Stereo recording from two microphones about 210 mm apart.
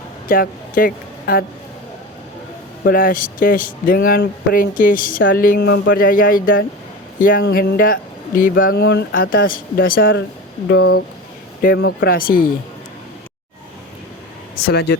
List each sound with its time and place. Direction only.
0.3 s speech: 40° left (ahead or behind)
2.8 s speech: 45° left (ahead or behind)
14.7 s speech: 50° left (ahead or behind)